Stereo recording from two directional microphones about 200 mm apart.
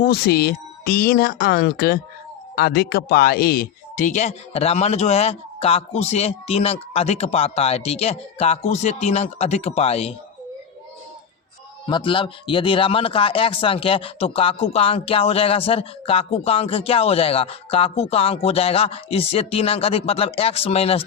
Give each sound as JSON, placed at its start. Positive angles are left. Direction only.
{"t": 0.0, "sound": "speech", "side_deg": 50}
{"t": 11.9, "sound": "speech", "side_deg": 25}